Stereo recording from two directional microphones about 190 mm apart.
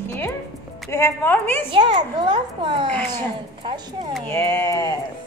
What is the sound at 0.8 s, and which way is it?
Speech, 15° left (ahead or behind).